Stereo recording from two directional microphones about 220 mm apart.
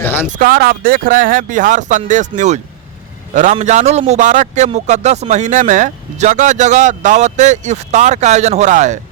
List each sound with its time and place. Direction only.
0.3 s a man's voice: 40° right (ahead or behind)